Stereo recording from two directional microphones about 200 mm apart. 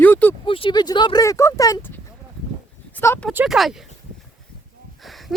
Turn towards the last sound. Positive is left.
turn(degrees=0)  # may be behind; listen again after turning